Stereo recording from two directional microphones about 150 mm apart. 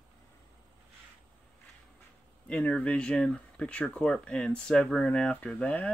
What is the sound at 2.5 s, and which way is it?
Speech, 5° left (ahead or behind).